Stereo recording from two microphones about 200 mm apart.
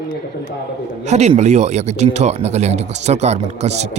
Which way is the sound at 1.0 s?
35° right (ahead or behind).